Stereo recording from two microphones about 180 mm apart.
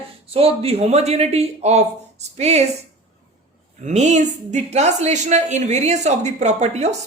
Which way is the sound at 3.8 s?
40° right (ahead or behind).